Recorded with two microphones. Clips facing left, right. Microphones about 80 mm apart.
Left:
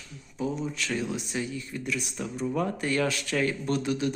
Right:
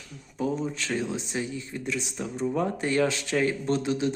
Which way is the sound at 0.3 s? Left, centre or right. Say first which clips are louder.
Right 2 dB; right.